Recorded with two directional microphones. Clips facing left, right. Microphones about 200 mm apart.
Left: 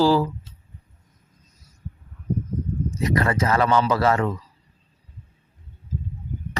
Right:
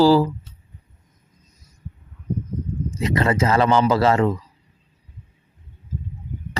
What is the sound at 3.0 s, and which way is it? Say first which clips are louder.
Speech: right 3 dB; 25° right (ahead or behind).